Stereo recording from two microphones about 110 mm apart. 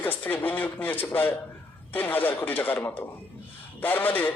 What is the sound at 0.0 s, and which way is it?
Speech, 15° left (ahead or behind).